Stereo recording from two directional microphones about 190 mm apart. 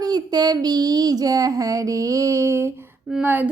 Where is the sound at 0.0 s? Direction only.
20° right (ahead or behind).